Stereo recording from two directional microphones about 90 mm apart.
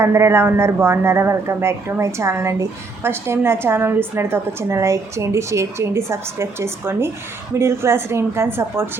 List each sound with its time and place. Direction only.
0.0 s speech: 30° right (ahead or behind)